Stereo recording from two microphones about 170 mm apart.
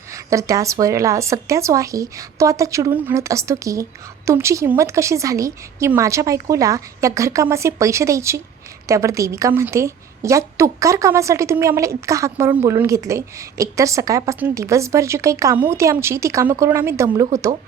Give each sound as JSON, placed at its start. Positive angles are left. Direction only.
{"t": 0.1, "sound": "a woman's voice", "side_deg": -20}